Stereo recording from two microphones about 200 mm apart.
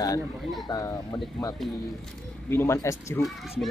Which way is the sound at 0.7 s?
15° left (ahead or behind).